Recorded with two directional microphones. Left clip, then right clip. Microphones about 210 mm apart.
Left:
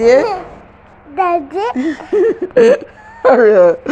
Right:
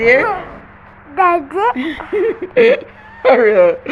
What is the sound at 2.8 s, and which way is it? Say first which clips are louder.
Speech: left 2 dB; 30° left (ahead or behind).